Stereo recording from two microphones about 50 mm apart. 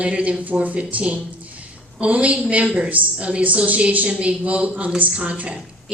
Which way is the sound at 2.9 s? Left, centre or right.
Right.